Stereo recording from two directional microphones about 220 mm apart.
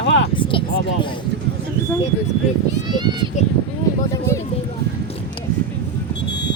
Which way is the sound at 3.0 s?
20° right (ahead or behind).